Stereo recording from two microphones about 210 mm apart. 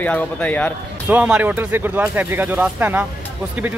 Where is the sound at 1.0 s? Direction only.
5° right (ahead or behind).